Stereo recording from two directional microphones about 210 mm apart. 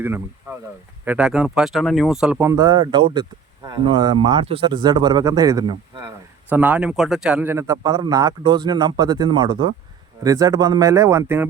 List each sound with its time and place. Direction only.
1.0 s speech: 5° right (ahead or behind)
2.5 s speech: 15° right (ahead or behind)
6.5 s a man's voice: 10° right (ahead or behind)